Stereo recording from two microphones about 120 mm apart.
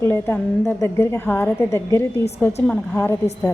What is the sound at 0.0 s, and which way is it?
A woman's voice, 20° left (ahead or behind).